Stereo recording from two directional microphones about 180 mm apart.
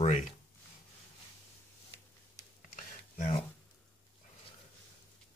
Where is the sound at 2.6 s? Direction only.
45° left (ahead or behind).